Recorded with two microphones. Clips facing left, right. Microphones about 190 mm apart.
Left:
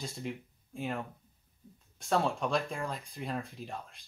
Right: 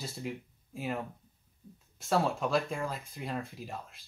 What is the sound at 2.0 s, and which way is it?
Speech, centre (ahead or behind).